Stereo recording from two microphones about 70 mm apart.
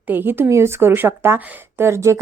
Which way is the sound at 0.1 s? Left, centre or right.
Right.